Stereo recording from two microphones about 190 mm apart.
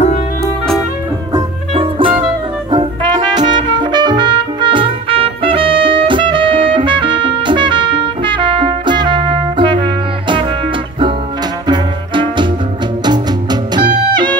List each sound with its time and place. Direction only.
1.3 s music: 30° right (ahead or behind)
2.2 s brass instrument: 25° right (ahead or behind)
11.6 s music: 25° right (ahead or behind)